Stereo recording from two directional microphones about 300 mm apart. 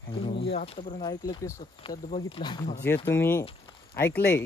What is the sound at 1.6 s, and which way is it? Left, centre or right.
Speech, left.